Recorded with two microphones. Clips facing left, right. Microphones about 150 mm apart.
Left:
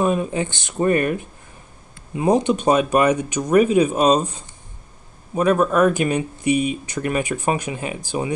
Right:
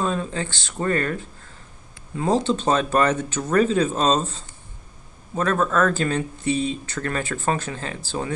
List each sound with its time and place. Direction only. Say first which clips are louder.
0.0 s speech: left 5 dB; 15° left (ahead or behind)